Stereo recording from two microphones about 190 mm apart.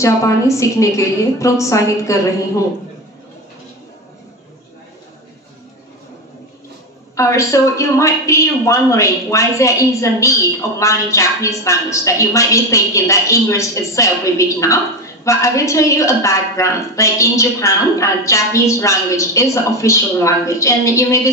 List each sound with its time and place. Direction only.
0.0 s a woman's voice: 15° left (ahead or behind)
7.2 s a woman's voice: 15° left (ahead or behind)